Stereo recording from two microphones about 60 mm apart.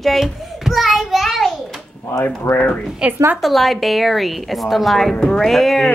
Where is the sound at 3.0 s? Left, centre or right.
Centre.